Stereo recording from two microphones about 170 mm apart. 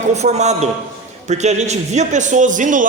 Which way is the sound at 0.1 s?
40° right (ahead or behind).